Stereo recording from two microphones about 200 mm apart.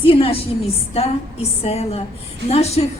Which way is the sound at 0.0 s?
25° left (ahead or behind).